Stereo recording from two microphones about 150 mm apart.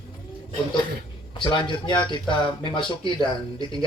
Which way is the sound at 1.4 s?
35° left (ahead or behind).